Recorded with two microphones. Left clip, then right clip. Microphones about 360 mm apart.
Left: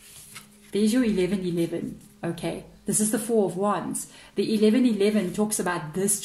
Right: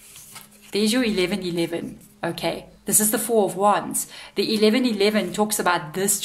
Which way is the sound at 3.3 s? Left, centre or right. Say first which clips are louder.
Right 3 dB; right.